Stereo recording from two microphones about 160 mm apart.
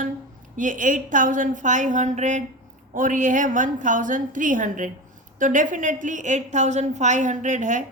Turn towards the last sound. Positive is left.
turn(degrees=-50)  # may be behind; listen again after turning